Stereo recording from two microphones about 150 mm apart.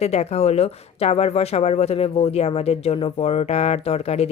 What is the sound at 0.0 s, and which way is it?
Speech, 45° left (ahead or behind).